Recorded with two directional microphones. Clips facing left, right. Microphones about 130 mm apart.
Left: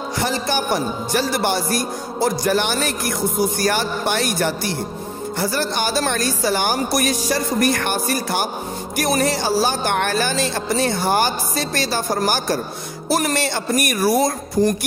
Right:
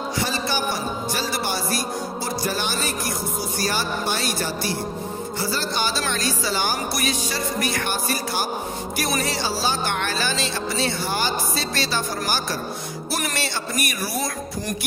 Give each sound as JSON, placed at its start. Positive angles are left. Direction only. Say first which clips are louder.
{"t": 0.2, "sound": "speech", "louder": "left 5 dB", "side_deg": 55}